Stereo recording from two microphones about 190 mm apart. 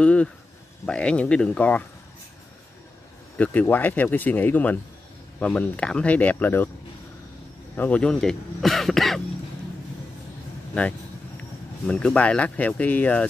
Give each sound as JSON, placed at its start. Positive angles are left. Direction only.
{"t": 0.0, "sound": "speech", "side_deg": 5}
{"t": 3.3, "sound": "speech", "side_deg": 10}
{"t": 7.7, "sound": "speech", "side_deg": 10}
{"t": 10.7, "sound": "speech", "side_deg": 5}